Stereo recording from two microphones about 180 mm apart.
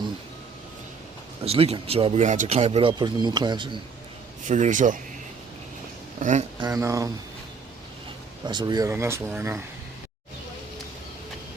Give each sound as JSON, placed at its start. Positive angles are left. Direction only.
{"t": 1.5, "sound": "speech", "side_deg": -35}
{"t": 4.4, "sound": "speech", "side_deg": -45}
{"t": 6.1, "sound": "speech", "side_deg": -45}
{"t": 6.6, "sound": "speech", "side_deg": -20}
{"t": 8.4, "sound": "speech", "side_deg": -25}